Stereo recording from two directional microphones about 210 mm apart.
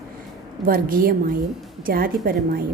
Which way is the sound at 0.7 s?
45° right (ahead or behind).